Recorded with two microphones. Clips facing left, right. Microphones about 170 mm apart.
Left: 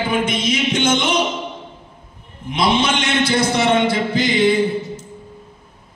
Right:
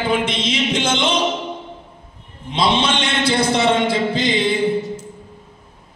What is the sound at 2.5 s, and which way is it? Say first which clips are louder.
A man's voice: left 1 dB; 30° right (ahead or behind).